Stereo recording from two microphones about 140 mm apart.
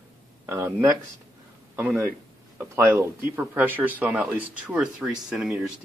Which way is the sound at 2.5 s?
20° right (ahead or behind).